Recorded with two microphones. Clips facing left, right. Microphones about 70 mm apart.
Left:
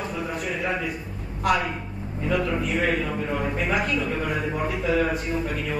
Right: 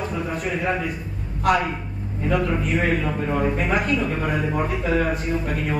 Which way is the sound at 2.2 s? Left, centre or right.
Right.